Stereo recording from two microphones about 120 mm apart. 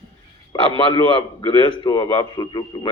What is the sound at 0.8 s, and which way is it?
A man's voice, 45° left (ahead or behind).